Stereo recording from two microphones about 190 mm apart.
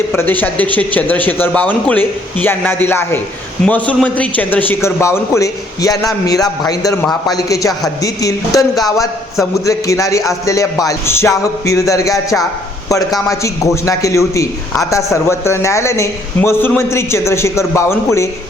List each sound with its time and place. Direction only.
0.1 s a man's voice: 10° left (ahead or behind)
7.0 s a man's voice: centre (ahead or behind)
7.3 s a man's voice: 15° left (ahead or behind)